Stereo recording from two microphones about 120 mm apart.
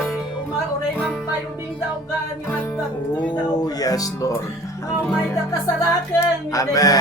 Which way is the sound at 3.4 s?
35° left (ahead or behind).